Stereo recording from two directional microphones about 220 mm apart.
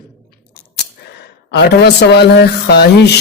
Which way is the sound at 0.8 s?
50° left (ahead or behind).